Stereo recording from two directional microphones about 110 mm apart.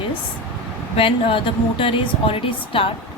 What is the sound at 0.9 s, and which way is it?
A woman's voice, 55° left (ahead or behind).